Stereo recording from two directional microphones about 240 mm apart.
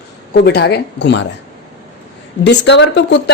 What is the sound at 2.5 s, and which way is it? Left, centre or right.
Speech, left.